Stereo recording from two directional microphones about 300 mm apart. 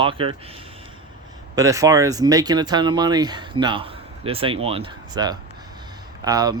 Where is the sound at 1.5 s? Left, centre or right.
Centre.